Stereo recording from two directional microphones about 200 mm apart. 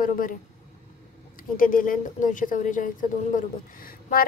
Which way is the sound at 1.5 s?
45° left (ahead or behind).